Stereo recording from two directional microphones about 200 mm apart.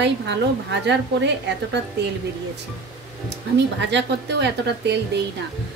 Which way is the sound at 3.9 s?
60° right (ahead or behind).